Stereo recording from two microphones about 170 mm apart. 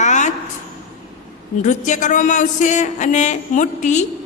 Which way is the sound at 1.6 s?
45° left (ahead or behind).